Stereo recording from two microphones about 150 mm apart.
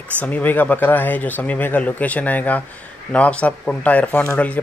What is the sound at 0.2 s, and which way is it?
Speech, 10° left (ahead or behind).